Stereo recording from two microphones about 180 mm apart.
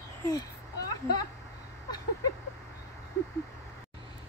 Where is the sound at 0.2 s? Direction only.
20° left (ahead or behind).